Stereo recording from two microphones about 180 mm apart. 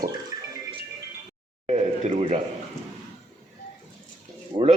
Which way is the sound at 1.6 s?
35° right (ahead or behind).